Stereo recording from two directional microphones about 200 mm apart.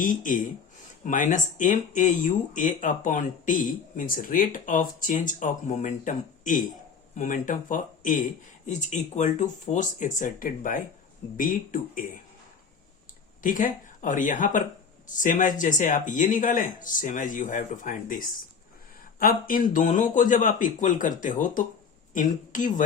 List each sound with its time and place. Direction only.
0.0 s speech: 40° left (ahead or behind)
13.4 s speech: 40° left (ahead or behind)